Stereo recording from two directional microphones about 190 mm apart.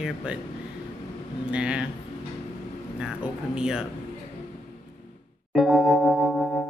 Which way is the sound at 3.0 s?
5° right (ahead or behind).